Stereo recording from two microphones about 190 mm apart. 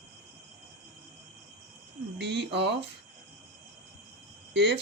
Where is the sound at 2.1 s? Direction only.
65° right (ahead or behind).